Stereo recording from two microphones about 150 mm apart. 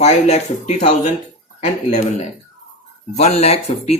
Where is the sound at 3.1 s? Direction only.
45° left (ahead or behind).